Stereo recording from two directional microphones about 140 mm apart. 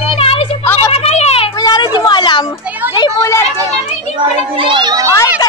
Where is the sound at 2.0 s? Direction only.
30° left (ahead or behind).